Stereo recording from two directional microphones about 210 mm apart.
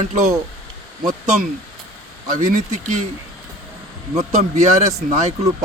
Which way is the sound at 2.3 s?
35° right (ahead or behind).